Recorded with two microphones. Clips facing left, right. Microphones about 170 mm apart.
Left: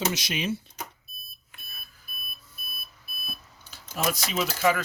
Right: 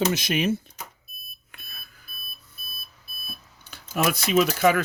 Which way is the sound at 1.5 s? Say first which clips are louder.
Right 2 dB; 65° right (ahead or behind).